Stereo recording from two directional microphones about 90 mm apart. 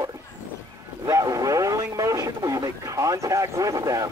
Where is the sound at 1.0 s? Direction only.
40° right (ahead or behind).